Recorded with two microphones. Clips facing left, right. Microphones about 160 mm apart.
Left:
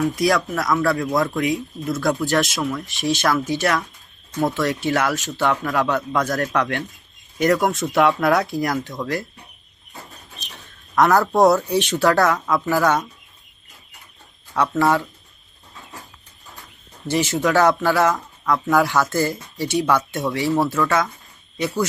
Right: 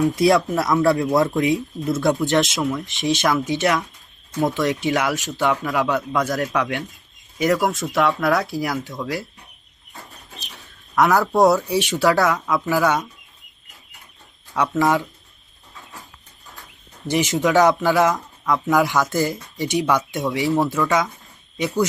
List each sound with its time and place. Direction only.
0.0 s speech: 25° right (ahead or behind)
5.7 s speech: 5° right (ahead or behind)
10.9 s speech: 5° right (ahead or behind)
12.6 s speech: 10° right (ahead or behind)
14.8 s speech: 15° right (ahead or behind)
17.1 s speech: 15° right (ahead or behind)